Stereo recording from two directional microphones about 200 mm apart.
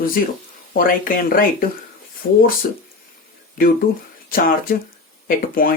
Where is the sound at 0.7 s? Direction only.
45° left (ahead or behind).